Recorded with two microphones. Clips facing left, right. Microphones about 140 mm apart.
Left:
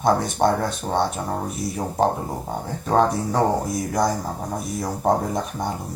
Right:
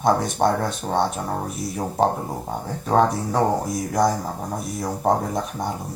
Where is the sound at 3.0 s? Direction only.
Centre (ahead or behind).